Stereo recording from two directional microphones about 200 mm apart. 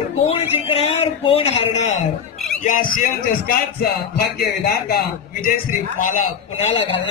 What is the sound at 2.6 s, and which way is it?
Music, 40° left (ahead or behind).